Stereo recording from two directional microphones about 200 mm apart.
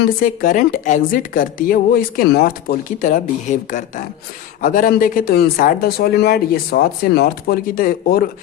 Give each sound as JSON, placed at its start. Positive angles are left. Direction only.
{"t": 0.0, "sound": "a woman's voice", "side_deg": 45}